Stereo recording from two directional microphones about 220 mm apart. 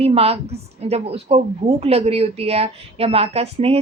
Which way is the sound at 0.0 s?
25° right (ahead or behind).